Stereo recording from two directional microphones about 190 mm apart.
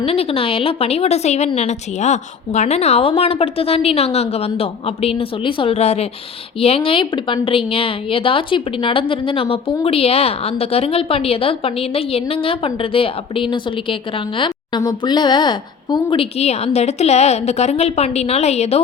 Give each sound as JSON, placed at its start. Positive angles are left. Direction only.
{"t": 0.0, "sound": "a woman's voice", "side_deg": 30}